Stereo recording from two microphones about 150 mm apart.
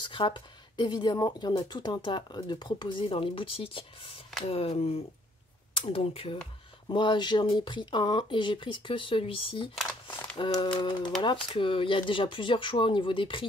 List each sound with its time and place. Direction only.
0.0 s speech: 30° left (ahead or behind)